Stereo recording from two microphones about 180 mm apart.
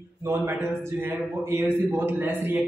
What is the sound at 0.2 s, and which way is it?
A man's voice, 15° right (ahead or behind).